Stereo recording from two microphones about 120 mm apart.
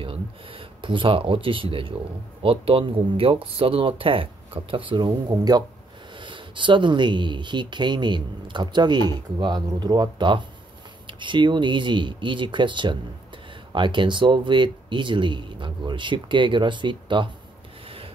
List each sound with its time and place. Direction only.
0.0 s speech: 45° right (ahead or behind)
17.8 s rub: 50° right (ahead or behind)